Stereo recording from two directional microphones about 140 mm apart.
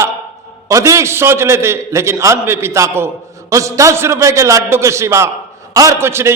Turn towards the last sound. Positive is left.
turn(degrees=-15)  # may be behind; listen again after turning